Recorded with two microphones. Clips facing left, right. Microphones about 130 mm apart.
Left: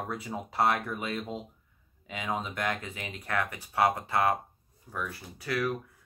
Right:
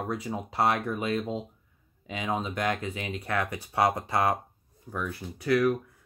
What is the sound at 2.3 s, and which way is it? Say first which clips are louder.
Speech: right 4 dB; 25° right (ahead or behind).